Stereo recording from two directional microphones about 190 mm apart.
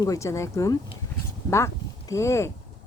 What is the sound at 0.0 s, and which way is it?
Speech, 15° left (ahead or behind).